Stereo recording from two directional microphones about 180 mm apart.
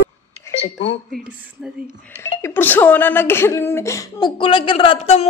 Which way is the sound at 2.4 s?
10° left (ahead or behind).